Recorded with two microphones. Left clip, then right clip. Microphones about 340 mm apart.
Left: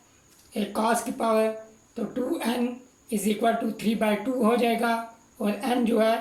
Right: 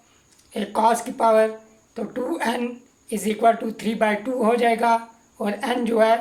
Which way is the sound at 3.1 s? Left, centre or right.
Right.